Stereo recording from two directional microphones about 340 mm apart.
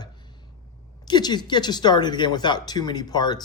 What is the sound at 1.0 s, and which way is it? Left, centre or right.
Speech, centre.